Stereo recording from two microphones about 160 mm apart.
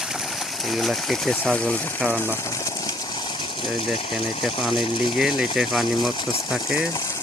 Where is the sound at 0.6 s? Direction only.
Centre (ahead or behind).